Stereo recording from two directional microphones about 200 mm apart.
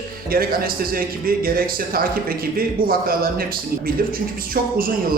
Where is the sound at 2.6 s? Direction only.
45° right (ahead or behind).